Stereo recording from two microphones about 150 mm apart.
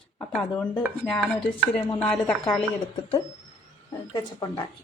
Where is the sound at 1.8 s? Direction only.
30° left (ahead or behind).